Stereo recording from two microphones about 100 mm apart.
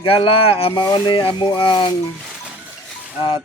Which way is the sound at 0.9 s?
55° left (ahead or behind).